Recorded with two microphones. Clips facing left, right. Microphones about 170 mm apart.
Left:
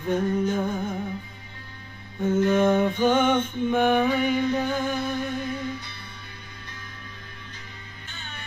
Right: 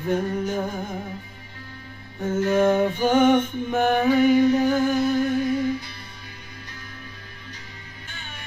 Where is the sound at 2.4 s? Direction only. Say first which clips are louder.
Right 2 dB; 10° right (ahead or behind).